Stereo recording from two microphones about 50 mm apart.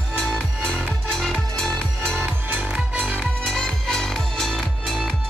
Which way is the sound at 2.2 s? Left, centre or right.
Right.